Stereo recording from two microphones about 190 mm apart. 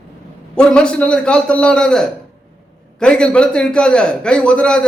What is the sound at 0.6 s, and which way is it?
A man's voice, 5° left (ahead or behind).